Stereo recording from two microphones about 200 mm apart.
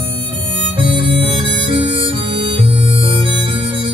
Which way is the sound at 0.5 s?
25° right (ahead or behind).